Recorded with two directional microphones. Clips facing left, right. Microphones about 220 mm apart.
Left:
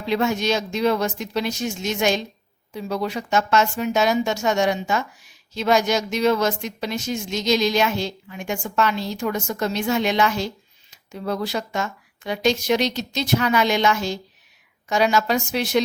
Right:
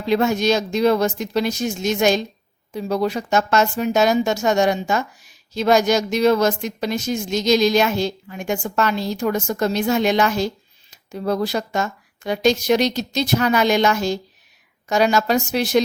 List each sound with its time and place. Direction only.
0.0 s speech: 40° right (ahead or behind)